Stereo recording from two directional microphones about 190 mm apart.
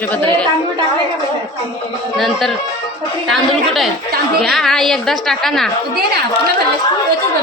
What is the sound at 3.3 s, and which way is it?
A woman's voice, centre (ahead or behind).